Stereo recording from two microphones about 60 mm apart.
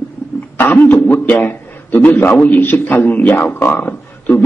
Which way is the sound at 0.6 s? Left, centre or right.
Left.